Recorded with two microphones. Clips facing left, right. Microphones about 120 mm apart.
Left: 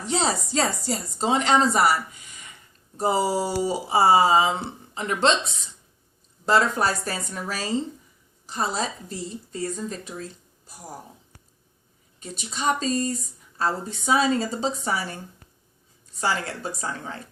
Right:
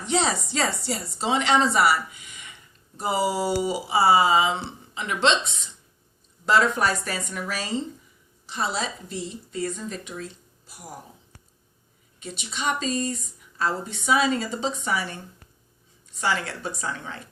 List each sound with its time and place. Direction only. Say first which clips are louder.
0.0 s a woman's voice: even; 35° left (ahead or behind)
6.4 s a woman's voice: even; 35° left (ahead or behind)
12.2 s a woman's voice: left 2 dB; 40° left (ahead or behind)
16.2 s a woman's voice: even; 40° left (ahead or behind)